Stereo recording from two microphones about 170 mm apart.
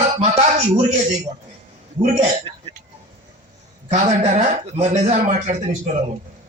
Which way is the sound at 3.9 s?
45° right (ahead or behind).